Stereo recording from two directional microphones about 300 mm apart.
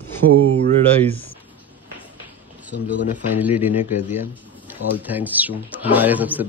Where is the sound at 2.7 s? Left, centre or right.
Left.